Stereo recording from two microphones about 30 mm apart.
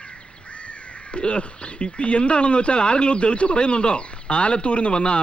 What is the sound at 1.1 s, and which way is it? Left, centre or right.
Speech, left.